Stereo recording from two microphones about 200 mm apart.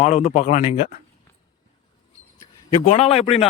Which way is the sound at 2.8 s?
30° left (ahead or behind).